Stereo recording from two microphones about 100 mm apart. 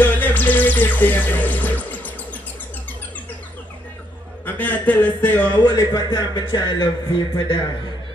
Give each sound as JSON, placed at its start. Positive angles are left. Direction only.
{"t": 0.0, "sound": "music", "side_deg": 15}
{"t": 4.5, "sound": "a man's voice", "side_deg": 20}
{"t": 5.6, "sound": "a man's voice", "side_deg": 40}